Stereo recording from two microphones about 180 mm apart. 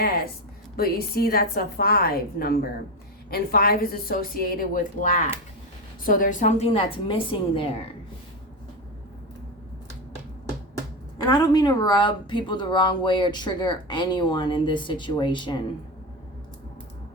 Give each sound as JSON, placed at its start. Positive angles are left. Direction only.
{"t": 0.8, "sound": "a woman's voice", "side_deg": 55}
{"t": 11.2, "sound": "speech", "side_deg": 20}